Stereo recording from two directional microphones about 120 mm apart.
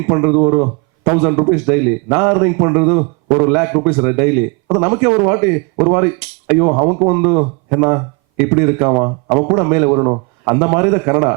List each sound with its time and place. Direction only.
0.0 s a man's voice: 15° right (ahead or behind)